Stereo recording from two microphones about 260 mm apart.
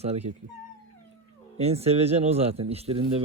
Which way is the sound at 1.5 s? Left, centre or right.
Right.